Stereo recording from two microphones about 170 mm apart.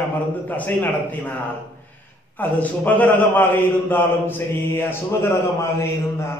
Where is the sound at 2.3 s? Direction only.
10° left (ahead or behind).